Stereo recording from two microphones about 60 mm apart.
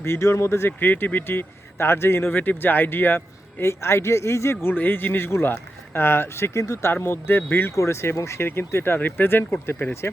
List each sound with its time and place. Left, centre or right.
0.0 s speech: left
0.8 s speech: left
4.7 s speech: left
7.1 s speech: left
7.8 s speech: left
8.4 s speech: left